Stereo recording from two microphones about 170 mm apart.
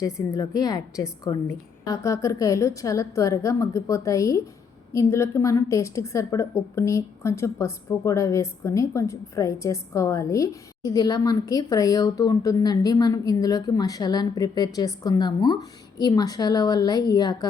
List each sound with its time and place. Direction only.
0.0 s a woman's voice: 20° left (ahead or behind)